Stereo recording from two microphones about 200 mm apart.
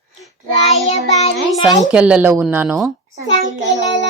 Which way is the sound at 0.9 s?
30° left (ahead or behind).